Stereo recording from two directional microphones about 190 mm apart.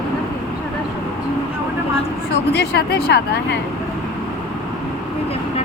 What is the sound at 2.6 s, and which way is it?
Speech, 60° left (ahead or behind).